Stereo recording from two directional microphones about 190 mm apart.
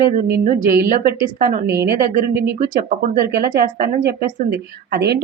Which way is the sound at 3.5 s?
55° right (ahead or behind).